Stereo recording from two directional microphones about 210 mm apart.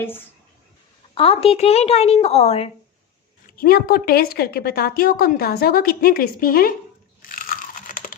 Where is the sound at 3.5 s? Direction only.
45° left (ahead or behind).